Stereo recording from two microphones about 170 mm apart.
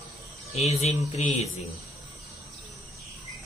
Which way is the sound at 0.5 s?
35° left (ahead or behind).